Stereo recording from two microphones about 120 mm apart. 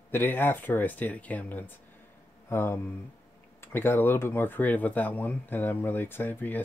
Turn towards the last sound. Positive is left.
turn(degrees=15)  # may be behind; listen again after turning